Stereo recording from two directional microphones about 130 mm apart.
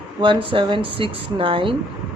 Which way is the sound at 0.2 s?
40° right (ahead or behind).